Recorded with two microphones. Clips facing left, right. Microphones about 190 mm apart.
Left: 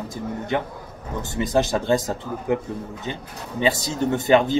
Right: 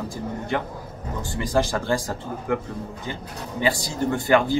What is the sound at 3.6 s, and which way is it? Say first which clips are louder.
Speech: left 2 dB; 20° left (ahead or behind).